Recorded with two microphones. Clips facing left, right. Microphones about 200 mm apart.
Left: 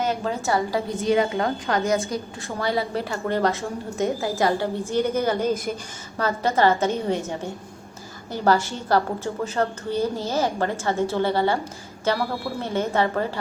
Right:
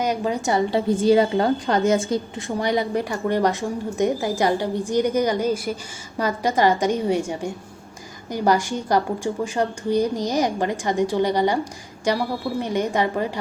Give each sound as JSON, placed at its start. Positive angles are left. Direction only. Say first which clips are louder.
{"t": 0.0, "sound": "a woman's voice", "louder": "right 2 dB", "side_deg": -15}
{"t": 0.9, "sound": "a woman's voice", "louder": "right 4 dB", "side_deg": -30}